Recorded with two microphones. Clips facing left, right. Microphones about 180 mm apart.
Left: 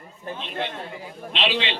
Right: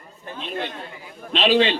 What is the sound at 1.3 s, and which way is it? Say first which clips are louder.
Speech: right 8 dB; 40° right (ahead or behind).